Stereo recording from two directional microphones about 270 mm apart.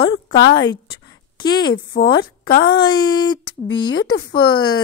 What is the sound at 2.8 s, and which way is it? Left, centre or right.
Speech, centre.